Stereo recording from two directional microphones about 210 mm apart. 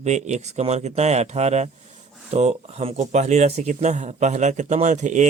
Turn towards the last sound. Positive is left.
turn(degrees=-35)  # may be behind; listen again after turning